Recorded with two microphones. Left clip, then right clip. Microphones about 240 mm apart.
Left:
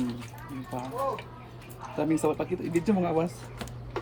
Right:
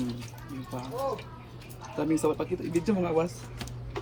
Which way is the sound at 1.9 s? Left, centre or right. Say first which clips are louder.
Even; left.